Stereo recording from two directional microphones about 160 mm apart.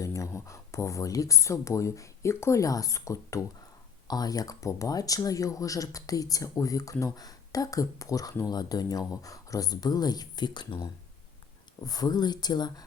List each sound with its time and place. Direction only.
0.0 s speech: 20° left (ahead or behind)